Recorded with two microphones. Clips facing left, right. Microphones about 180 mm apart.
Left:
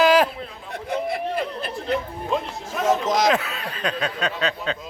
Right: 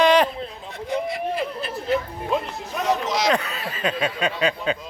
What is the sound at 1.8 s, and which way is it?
Speech, centre (ahead or behind).